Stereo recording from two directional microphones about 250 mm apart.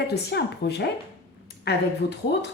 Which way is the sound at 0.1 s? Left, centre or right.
Left.